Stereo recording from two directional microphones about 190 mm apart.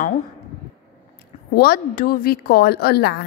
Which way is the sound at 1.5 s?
55° left (ahead or behind).